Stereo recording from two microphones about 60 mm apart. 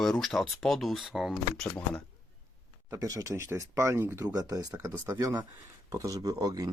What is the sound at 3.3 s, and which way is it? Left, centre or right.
Speech, right.